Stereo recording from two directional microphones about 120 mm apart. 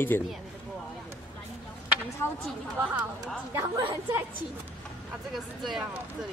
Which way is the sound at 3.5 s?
20° right (ahead or behind).